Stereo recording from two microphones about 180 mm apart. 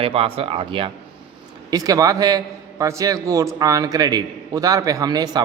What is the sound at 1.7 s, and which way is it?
A man's voice, 20° right (ahead or behind).